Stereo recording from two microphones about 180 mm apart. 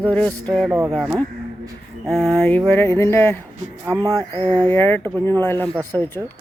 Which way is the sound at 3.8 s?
15° right (ahead or behind).